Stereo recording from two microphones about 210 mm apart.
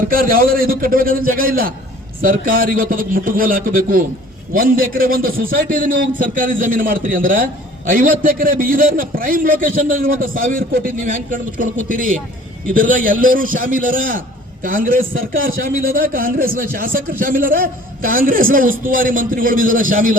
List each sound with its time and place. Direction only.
0.1 s a man's voice: 45° right (ahead or behind)